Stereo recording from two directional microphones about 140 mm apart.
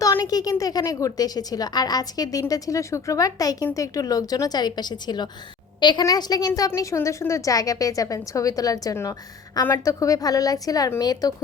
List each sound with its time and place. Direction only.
0.0 s a woman's voice: 25° left (ahead or behind)